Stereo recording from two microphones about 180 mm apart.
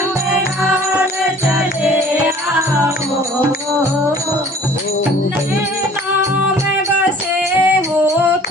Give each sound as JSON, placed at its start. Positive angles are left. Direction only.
{"t": 7.6, "sound": "singing", "side_deg": -15}